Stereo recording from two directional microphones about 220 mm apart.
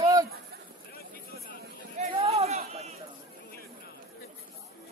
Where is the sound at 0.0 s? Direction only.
15° right (ahead or behind).